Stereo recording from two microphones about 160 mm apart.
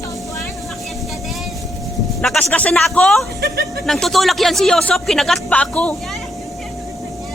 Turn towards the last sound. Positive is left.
turn(degrees=5)  # may be behind; listen again after turning